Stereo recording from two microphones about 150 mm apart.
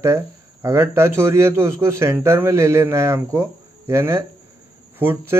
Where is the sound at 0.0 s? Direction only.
20° right (ahead or behind).